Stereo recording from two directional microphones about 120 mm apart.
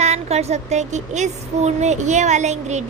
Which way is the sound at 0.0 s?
65° right (ahead or behind).